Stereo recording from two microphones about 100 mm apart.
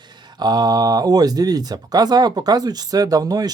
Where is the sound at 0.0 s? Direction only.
50° right (ahead or behind).